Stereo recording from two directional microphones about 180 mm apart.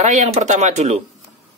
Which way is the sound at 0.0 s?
40° right (ahead or behind).